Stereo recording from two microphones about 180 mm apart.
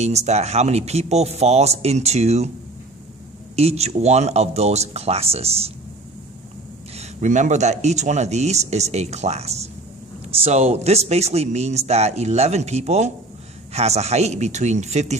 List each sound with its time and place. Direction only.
0.0 s speech: 40° right (ahead or behind)
3.5 s speech: 35° right (ahead or behind)
7.0 s speech: 40° right (ahead or behind)